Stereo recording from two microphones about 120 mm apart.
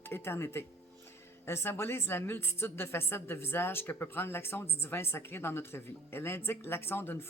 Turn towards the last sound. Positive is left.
turn(degrees=20)  # may be behind; listen again after turning